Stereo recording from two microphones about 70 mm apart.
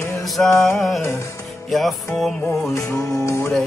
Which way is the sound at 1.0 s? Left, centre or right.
Left.